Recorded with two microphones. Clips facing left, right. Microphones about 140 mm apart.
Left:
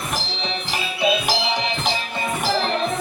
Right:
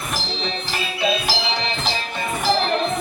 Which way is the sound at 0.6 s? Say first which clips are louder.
Left 2 dB; 15° left (ahead or behind).